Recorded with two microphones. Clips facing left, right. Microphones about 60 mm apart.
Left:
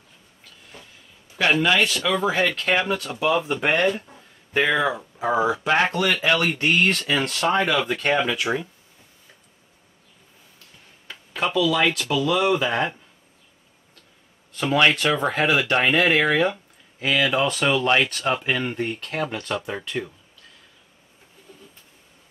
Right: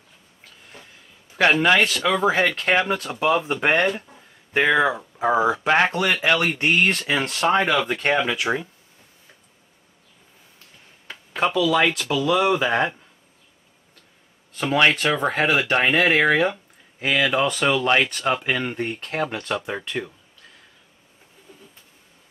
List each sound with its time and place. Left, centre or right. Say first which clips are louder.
1.4 s speech: right 2 dB; right
4.6 s speech: right 2 dB; right
11.1 s a sound: right 3 dB; right
11.7 s speech: right 1 dB; right
14.7 s speech: even; centre